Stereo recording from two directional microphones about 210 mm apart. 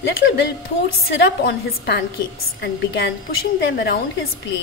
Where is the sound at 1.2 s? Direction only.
50° left (ahead or behind).